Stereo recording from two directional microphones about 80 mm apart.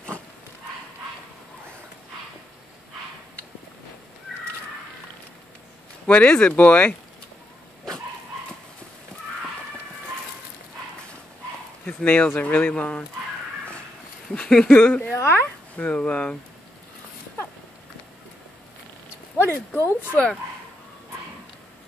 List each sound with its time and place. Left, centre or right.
6.0 s speech: centre
11.8 s speech: centre
14.3 s speech: centre
14.8 s speech: left
19.3 s speech: left